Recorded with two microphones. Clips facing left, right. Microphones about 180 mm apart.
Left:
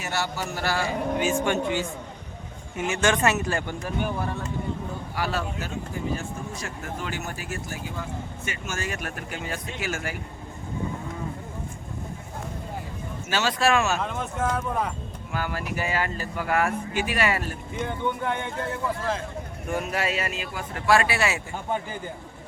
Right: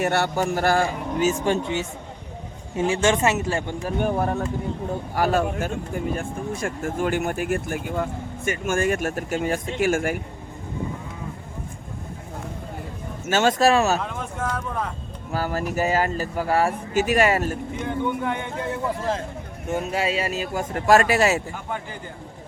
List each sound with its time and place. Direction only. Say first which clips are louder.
0.0 s speech: right 8 dB; 60° right (ahead or behind); by 1.5 s 40° right (ahead or behind)
1.6 s speech: even; 25° right (ahead or behind)
3.8 s speech: right 8 dB; 45° right (ahead or behind)
13.3 s speech: right 5 dB; 45° right (ahead or behind)
14.0 s speech: left 1 dB; centre (ahead or behind)
15.3 s speech: right 5 dB; 40° right (ahead or behind)
17.7 s speech: right 1 dB; 5° right (ahead or behind)
19.7 s speech: right 3 dB; 25° right (ahead or behind)